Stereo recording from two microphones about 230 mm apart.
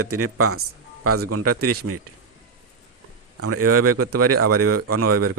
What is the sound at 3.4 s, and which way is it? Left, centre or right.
Speech, right.